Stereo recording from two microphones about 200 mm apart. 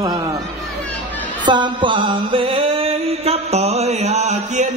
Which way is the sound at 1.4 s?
20° right (ahead or behind).